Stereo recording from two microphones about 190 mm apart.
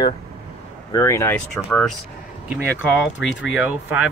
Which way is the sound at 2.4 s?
5° right (ahead or behind).